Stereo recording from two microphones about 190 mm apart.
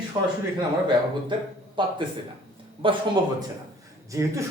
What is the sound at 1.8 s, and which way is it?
A man's voice, 25° right (ahead or behind).